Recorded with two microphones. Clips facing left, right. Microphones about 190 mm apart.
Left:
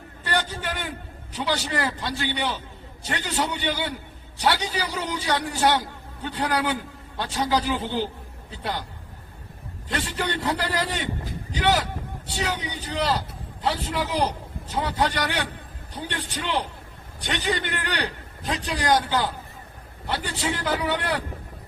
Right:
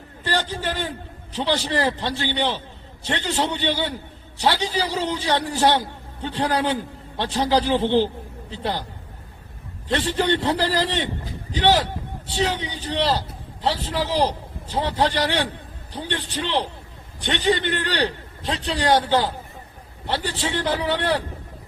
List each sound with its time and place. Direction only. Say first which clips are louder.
0.3 s a man's voice: right 3 dB; 30° right (ahead or behind)
9.9 s a man's voice: right 7 dB; 30° right (ahead or behind)